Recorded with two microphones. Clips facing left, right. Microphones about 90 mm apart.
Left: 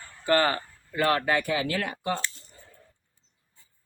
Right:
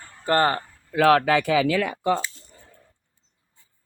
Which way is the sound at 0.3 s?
35° right (ahead or behind).